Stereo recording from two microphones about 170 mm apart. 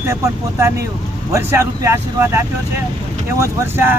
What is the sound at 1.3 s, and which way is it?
Speech, 15° right (ahead or behind).